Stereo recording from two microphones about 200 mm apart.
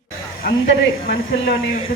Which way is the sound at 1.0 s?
50° left (ahead or behind).